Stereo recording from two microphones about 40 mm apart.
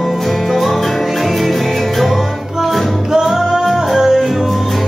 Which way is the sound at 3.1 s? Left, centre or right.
Centre.